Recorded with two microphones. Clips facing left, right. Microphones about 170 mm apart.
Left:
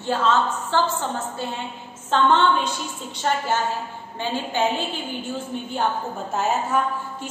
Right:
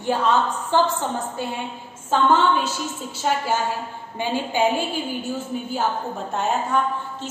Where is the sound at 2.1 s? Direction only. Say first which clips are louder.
Even; 5° right (ahead or behind).